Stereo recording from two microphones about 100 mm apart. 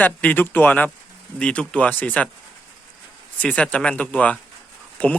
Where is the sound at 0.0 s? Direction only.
15° left (ahead or behind).